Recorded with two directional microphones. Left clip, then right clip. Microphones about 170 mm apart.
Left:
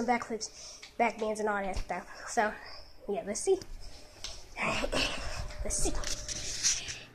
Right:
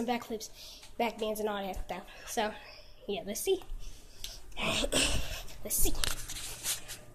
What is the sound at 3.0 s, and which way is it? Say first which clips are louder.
Speech: left 2 dB; 20° right (ahead or behind).